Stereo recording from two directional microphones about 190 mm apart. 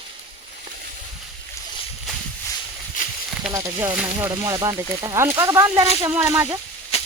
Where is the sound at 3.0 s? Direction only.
45° left (ahead or behind).